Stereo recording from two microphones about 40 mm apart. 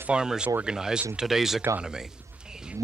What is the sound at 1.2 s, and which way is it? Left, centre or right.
Speech, centre.